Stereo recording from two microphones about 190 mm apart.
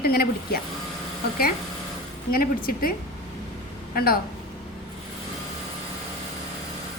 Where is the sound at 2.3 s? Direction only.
50° left (ahead or behind).